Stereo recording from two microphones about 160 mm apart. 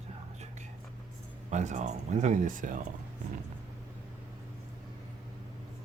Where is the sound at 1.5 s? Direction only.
50° right (ahead or behind).